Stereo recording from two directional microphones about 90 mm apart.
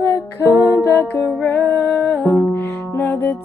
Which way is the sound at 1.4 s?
20° left (ahead or behind).